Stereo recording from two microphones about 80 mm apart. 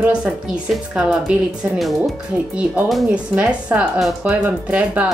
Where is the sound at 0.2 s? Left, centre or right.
Centre.